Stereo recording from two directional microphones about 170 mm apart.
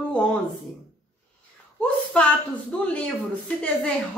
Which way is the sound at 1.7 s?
5° left (ahead or behind).